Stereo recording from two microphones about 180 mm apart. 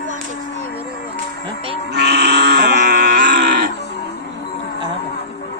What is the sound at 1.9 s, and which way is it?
Grunt, 65° right (ahead or behind).